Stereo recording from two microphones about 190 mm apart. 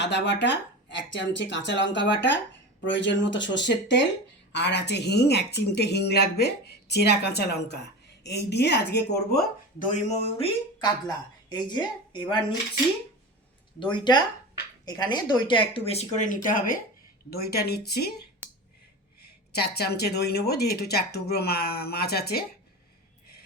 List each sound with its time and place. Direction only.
0.0 s speech: 65° left (ahead or behind)
10.1 s a woman's voice: 30° left (ahead or behind)
13.7 s speech: 25° left (ahead or behind); by 16.7 s 45° left (ahead or behind)
17.3 s speech: 55° left (ahead or behind)
19.2 s speech: 55° left (ahead or behind)